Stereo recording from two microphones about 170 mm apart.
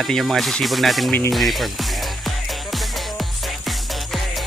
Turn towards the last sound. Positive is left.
turn(degrees=0)  # may be behind; listen again after turning